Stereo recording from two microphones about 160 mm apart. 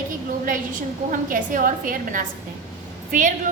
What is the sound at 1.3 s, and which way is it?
A woman's voice, 60° right (ahead or behind).